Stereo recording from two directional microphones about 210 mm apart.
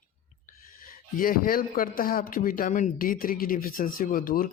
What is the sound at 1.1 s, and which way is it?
A man's voice, 40° left (ahead or behind).